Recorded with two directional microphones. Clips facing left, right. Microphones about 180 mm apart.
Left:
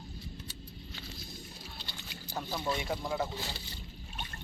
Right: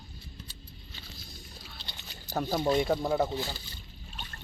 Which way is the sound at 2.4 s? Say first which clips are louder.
Right 8 dB; 55° right (ahead or behind).